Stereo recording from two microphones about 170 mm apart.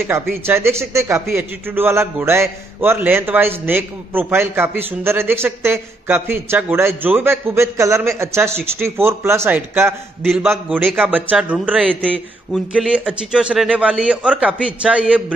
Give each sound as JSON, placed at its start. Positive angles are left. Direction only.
{"t": 0.1, "sound": "a man's voice", "side_deg": -15}
{"t": 10.2, "sound": "a man's voice", "side_deg": -5}